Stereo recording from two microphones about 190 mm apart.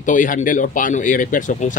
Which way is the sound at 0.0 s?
45° left (ahead or behind).